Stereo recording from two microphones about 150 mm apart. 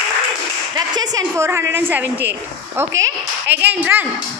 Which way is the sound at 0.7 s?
25° right (ahead or behind).